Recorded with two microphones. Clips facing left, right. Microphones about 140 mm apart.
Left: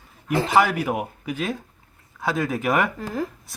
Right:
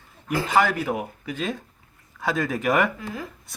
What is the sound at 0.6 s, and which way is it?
Speech, 10° left (ahead or behind).